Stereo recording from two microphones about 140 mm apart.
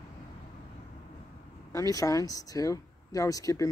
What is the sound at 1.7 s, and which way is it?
Speech, 25° left (ahead or behind).